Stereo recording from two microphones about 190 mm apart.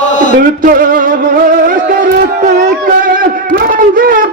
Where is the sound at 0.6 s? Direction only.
45° right (ahead or behind).